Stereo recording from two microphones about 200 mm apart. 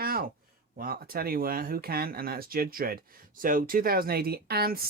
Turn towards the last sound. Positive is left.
turn(degrees=-50)  # may be behind; listen again after turning